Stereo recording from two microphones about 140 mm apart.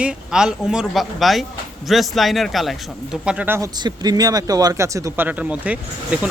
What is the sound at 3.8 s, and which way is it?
Speech, 30° right (ahead or behind).